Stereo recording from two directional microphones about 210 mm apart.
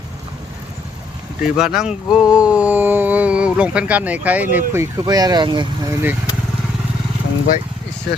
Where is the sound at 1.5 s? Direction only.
Centre (ahead or behind).